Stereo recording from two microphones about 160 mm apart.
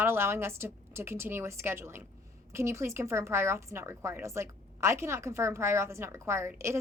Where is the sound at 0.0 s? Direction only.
15° right (ahead or behind).